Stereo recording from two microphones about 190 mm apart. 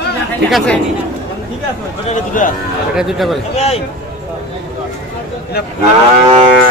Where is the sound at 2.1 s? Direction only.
45° left (ahead or behind).